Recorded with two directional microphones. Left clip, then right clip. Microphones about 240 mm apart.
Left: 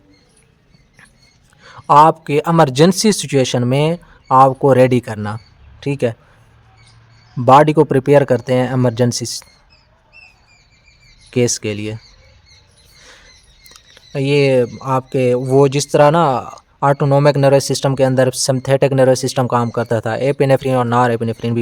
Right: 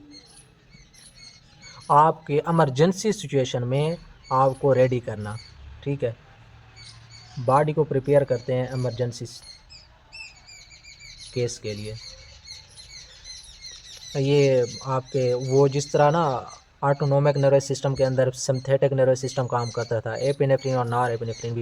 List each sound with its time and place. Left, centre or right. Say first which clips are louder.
1.6 s speech: left 9 dB; left
7.4 s speech: left 12 dB; left
11.3 s speech: left 11 dB; left
14.1 s speech: left 6 dB; left